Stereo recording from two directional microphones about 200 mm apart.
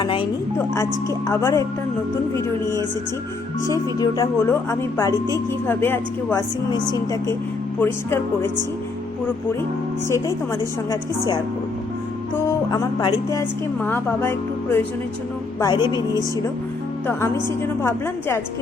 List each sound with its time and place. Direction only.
0.0 s music: 25° left (ahead or behind)
1.3 s speech: 15° left (ahead or behind)
12.5 s speech: 20° left (ahead or behind)
15.6 s speech: 20° left (ahead or behind)